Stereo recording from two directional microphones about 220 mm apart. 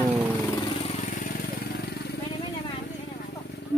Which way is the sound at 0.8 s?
30° left (ahead or behind).